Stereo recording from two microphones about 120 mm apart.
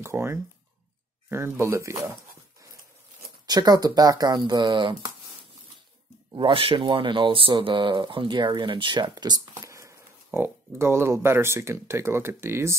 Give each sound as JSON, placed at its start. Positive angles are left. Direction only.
{"t": 0.0, "sound": "speech", "side_deg": -20}
{"t": 3.4, "sound": "speech", "side_deg": -35}
{"t": 6.3, "sound": "speech", "side_deg": -45}